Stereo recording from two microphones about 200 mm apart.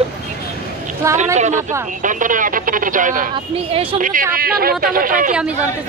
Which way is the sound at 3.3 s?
25° right (ahead or behind).